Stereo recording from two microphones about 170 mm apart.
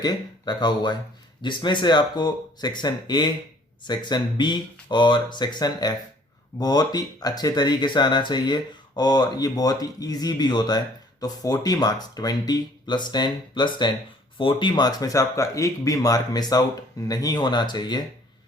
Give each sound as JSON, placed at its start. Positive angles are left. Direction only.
{"t": 0.0, "sound": "speech", "side_deg": 25}